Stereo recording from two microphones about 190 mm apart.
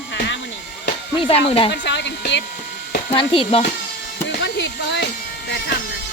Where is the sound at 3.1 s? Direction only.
25° left (ahead or behind).